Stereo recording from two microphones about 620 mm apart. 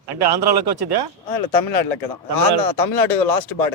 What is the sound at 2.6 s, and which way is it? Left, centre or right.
Speech, left.